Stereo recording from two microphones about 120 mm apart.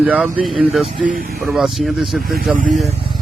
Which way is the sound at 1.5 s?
Centre (ahead or behind).